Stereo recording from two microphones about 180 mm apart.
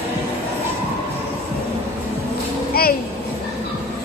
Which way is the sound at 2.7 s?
55° left (ahead or behind).